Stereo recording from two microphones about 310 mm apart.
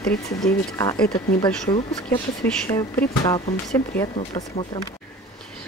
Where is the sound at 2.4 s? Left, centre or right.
Centre.